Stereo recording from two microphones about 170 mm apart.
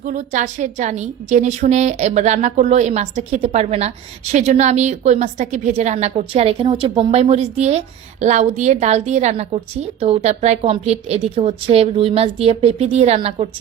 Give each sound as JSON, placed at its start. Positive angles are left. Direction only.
{"t": 0.0, "sound": "a woman's voice", "side_deg": -45}